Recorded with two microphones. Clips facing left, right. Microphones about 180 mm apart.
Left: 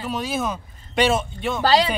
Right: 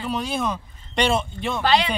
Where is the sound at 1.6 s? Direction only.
35° left (ahead or behind).